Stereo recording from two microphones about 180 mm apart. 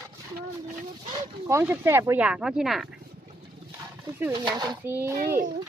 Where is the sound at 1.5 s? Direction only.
15° right (ahead or behind).